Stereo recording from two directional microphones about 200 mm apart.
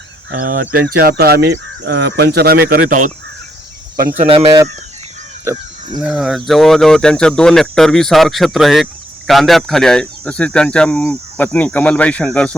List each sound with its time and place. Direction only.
0.3 s speech: 45° right (ahead or behind)
4.4 s speech: 20° right (ahead or behind)
6.0 s speech: centre (ahead or behind)